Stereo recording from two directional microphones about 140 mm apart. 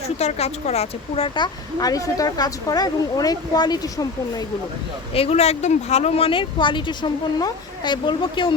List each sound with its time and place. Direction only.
0.2 s speech: 50° left (ahead or behind)
1.8 s speech: 25° left (ahead or behind)
5.1 s speech: 45° left (ahead or behind)